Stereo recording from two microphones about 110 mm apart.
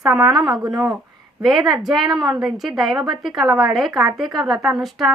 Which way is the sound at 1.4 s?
Centre (ahead or behind).